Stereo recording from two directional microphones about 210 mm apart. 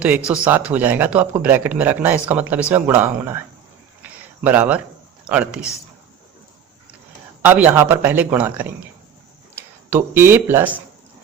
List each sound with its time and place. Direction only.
0.3 s speech: 5° right (ahead or behind)
4.4 s speech: 10° right (ahead or behind)
7.4 s speech: 10° right (ahead or behind)